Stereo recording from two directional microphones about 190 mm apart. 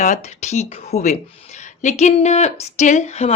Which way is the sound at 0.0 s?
40° left (ahead or behind).